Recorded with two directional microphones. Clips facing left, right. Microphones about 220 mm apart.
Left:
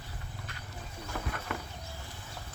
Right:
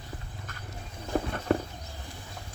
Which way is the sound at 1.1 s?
35° right (ahead or behind).